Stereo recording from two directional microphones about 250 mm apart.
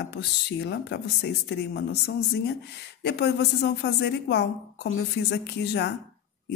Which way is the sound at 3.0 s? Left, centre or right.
Left.